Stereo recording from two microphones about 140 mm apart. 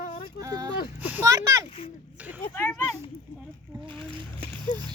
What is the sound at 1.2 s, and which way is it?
Speech, 25° right (ahead or behind).